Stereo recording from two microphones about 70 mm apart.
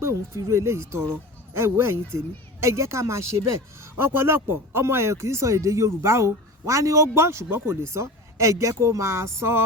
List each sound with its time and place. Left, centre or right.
0.0 s speech: right
3.9 s speech: right